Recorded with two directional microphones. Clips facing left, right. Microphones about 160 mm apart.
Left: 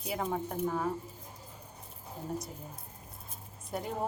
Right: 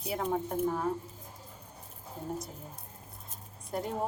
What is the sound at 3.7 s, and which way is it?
Speech, centre (ahead or behind).